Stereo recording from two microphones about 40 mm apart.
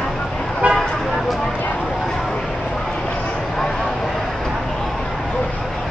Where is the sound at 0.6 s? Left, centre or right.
Right.